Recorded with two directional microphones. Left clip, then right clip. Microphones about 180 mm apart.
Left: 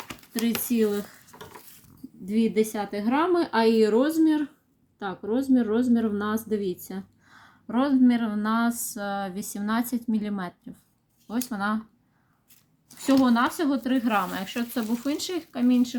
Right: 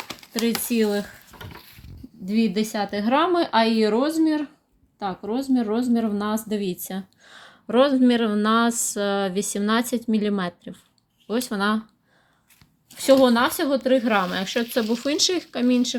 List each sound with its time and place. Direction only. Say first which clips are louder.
0.7 s a woman's voice: right 1 dB; 40° right (ahead or behind)
2.2 s a woman's voice: even; 40° right (ahead or behind)
13.1 s a woman's voice: right 6 dB; 30° right (ahead or behind)